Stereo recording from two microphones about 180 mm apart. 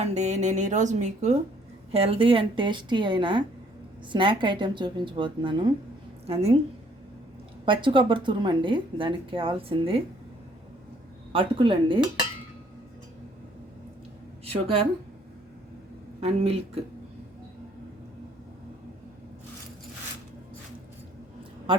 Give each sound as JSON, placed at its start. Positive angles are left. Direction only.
{"t": 0.0, "sound": "a woman's voice", "side_deg": -40}
{"t": 7.6, "sound": "a woman's voice", "side_deg": -30}
{"t": 11.3, "sound": "a woman's voice", "side_deg": -30}
{"t": 16.2, "sound": "speech", "side_deg": -35}
{"t": 21.7, "sound": "a woman's voice", "side_deg": -25}